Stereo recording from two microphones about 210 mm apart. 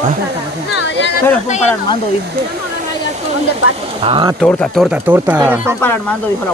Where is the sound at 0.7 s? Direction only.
55° left (ahead or behind).